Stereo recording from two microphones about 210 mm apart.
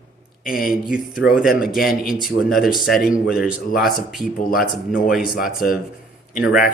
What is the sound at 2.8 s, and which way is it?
Speech, 45° left (ahead or behind).